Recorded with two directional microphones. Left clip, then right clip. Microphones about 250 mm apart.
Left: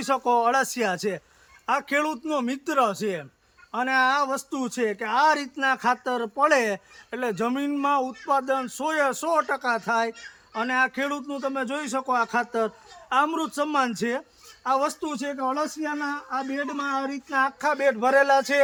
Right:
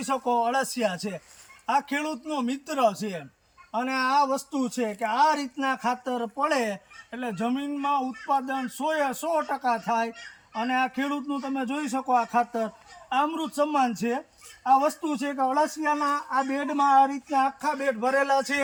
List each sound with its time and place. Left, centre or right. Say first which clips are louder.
0.0 s speech: left 3 dB; centre
15.5 s speech: right 4 dB; right
17.6 s speech: left 4 dB; centre